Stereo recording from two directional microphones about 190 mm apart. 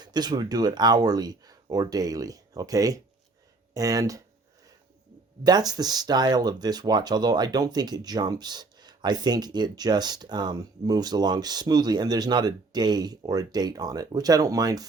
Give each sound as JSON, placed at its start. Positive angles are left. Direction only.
{"t": 0.0, "sound": "speech", "side_deg": -20}
{"t": 5.4, "sound": "speech", "side_deg": -20}